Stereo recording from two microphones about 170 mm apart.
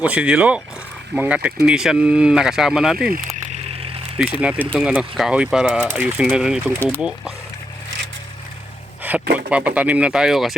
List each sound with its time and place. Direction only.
0.0 s speech: 5° right (ahead or behind)
3.1 s a sound: 45° right (ahead or behind)
4.4 s speech: 10° right (ahead or behind)
6.7 s speech: 10° left (ahead or behind)
9.5 s speech: 5° right (ahead or behind)